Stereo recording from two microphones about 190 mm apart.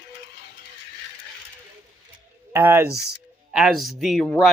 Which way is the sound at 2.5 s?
10° right (ahead or behind).